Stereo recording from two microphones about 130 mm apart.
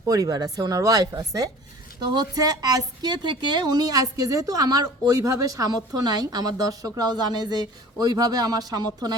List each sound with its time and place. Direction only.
0.0 s a woman's voice: 25° right (ahead or behind)